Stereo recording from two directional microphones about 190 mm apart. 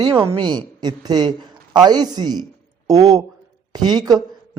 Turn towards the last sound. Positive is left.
turn(degrees=-20)  # may be behind; listen again after turning